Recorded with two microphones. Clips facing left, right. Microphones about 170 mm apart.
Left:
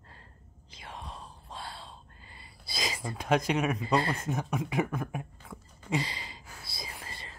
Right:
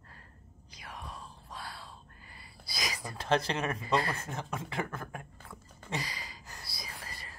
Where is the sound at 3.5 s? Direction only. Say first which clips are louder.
Left 4 dB; 10° left (ahead or behind).